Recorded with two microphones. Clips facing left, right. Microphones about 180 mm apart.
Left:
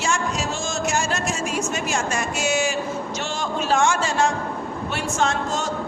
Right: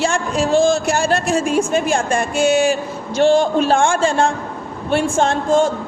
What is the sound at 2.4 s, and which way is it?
Speech, 55° right (ahead or behind).